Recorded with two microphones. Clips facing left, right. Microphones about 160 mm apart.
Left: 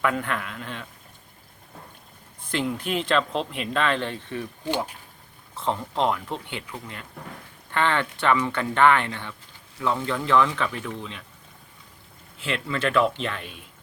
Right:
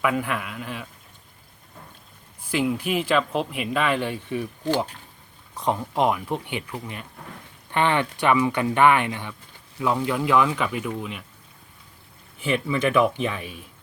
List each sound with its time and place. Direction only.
0.0 s a man's voice: 5° right (ahead or behind)
2.4 s speech: 5° right (ahead or behind)
5.5 s speech: 15° right (ahead or behind)
12.5 s speech: 15° right (ahead or behind)